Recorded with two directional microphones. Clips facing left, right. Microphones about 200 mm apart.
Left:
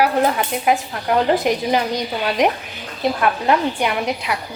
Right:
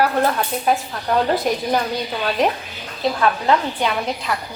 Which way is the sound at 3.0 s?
15° left (ahead or behind).